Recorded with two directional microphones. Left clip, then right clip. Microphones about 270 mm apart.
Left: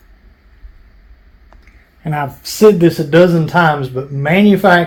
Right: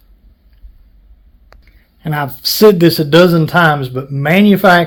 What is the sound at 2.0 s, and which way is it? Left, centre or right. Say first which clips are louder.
A man's voice: right 2 dB; right.